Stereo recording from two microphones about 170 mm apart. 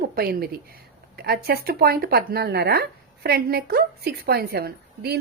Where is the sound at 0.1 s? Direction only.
65° right (ahead or behind).